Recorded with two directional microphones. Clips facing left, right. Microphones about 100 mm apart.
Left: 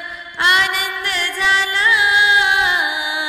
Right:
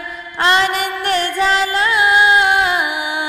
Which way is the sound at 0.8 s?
45° right (ahead or behind).